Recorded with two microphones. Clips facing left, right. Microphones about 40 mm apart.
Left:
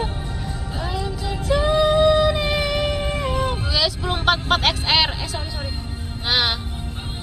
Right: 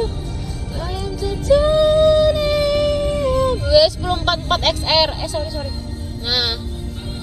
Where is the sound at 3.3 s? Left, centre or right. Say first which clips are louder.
Right 6 dB; left.